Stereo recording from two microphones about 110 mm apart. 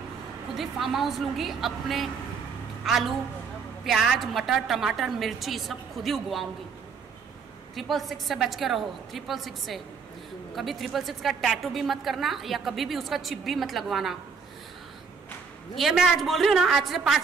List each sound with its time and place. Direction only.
0.6 s a woman's voice: centre (ahead or behind)
7.7 s a woman's voice: centre (ahead or behind)
15.7 s a woman's voice: centre (ahead or behind)